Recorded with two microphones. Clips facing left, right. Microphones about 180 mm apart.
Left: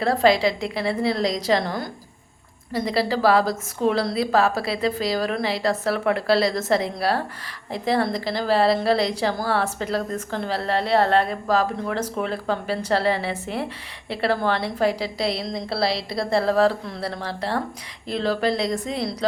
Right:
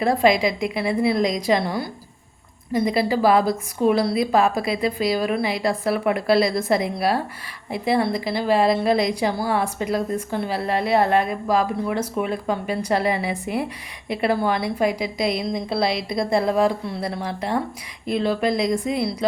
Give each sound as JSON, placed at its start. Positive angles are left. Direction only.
{"t": 0.0, "sound": "a woman's voice", "side_deg": -15}
{"t": 15.9, "sound": "a woman's voice", "side_deg": 30}
{"t": 16.1, "sound": "a woman's voice", "side_deg": -15}